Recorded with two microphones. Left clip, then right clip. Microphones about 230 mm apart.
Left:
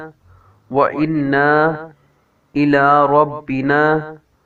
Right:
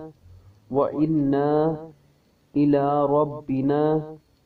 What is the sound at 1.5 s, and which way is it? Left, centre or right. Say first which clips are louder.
A man's voice: left 8 dB; left.